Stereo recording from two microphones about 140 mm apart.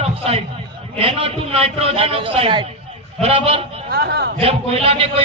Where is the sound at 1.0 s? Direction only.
45° right (ahead or behind).